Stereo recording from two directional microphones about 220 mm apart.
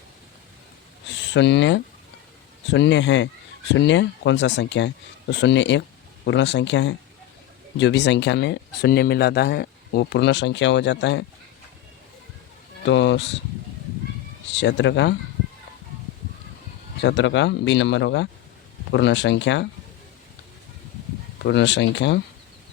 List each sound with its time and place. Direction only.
1.0 s speech: 55° left (ahead or behind)
12.8 s speech: 55° left (ahead or behind)
14.5 s speech: 55° left (ahead or behind)
17.0 s speech: 55° left (ahead or behind)
21.4 s speech: 55° left (ahead or behind)